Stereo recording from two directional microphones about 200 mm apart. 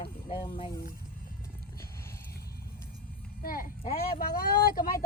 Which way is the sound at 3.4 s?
45° left (ahead or behind).